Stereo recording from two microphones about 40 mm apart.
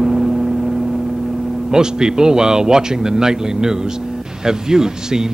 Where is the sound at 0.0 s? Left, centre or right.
Centre.